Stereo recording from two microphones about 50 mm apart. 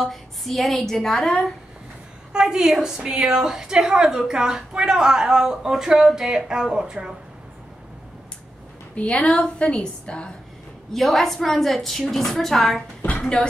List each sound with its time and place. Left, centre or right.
0.0 s a woman's voice: centre
2.3 s a woman's voice: centre
8.9 s a woman's voice: left
10.9 s a woman's voice: centre